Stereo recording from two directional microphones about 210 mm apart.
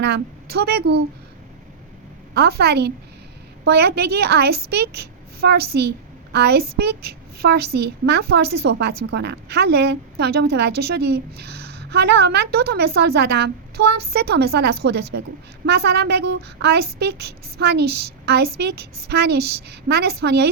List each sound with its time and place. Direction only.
0.0 s a woman's voice: 50° right (ahead or behind)
2.3 s a woman's voice: 50° right (ahead or behind)